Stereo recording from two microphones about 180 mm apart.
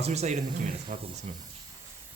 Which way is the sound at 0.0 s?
35° right (ahead or behind).